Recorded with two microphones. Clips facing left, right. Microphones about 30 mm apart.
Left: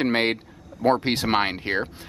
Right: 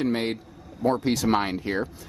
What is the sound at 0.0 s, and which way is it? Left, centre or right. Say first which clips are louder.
Speech: left 4 dB; left.